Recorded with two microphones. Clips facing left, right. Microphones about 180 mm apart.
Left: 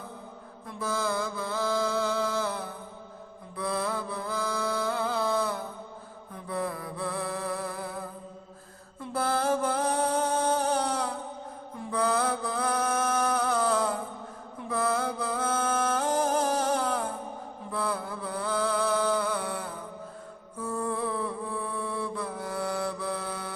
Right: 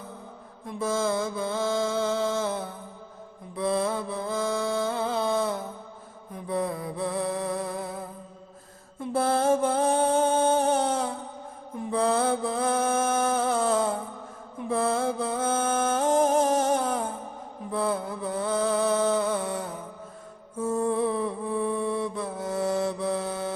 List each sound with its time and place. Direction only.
0.7 s mantra: 25° right (ahead or behind)
6.3 s music: 20° right (ahead or behind)
11.9 s mantra: 25° right (ahead or behind)
14.7 s music: 25° right (ahead or behind)